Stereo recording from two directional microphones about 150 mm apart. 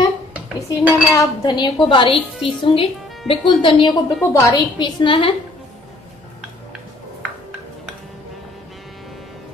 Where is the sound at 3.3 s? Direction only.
35° left (ahead or behind).